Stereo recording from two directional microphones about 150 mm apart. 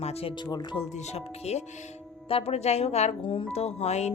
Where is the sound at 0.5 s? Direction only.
30° left (ahead or behind).